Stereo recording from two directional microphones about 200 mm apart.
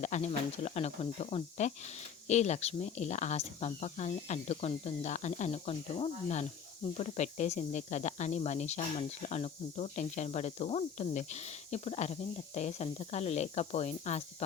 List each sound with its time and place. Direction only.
0.0 s speech: 35° left (ahead or behind)